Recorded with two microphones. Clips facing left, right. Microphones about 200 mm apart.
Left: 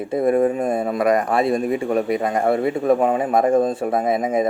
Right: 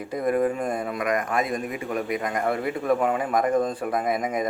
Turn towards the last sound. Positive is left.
turn(degrees=25)  # may be behind; listen again after turning